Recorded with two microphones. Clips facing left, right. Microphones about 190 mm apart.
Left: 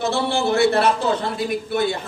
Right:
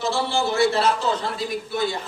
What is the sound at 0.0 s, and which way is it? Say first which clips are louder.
A man's voice: left 3 dB; 60° left (ahead or behind).